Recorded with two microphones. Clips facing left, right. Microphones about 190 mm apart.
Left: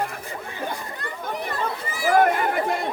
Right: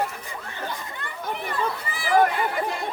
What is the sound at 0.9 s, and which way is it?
Chatter, 40° left (ahead or behind).